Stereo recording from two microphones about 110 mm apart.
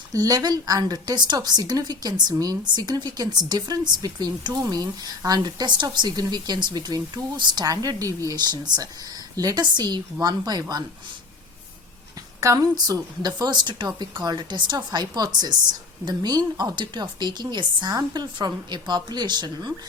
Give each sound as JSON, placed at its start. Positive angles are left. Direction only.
{"t": 0.1, "sound": "a woman's voice", "side_deg": -35}
{"t": 12.4, "sound": "a woman's voice", "side_deg": -30}